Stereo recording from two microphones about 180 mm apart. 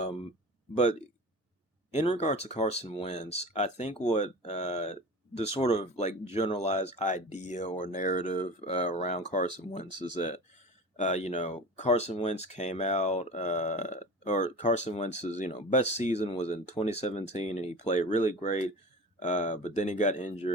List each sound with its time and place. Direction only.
0.7 s speech: 40° left (ahead or behind)